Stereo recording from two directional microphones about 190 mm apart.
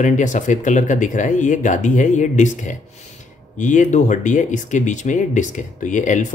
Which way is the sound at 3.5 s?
40° left (ahead or behind).